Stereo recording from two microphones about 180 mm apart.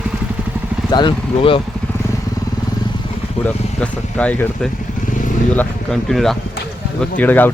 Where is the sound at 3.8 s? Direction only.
5° left (ahead or behind).